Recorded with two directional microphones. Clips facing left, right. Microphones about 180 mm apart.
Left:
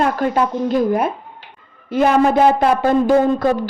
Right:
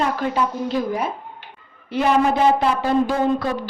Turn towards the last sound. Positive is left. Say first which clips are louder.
# left 4 dB
turn(degrees=45)  # may be behind; listen again after turning